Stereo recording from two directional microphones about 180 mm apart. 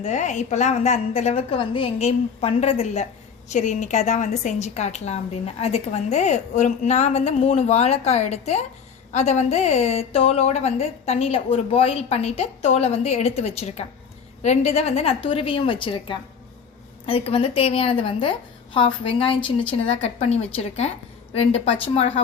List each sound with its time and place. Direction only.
0.0 s a woman's voice: 40° left (ahead or behind)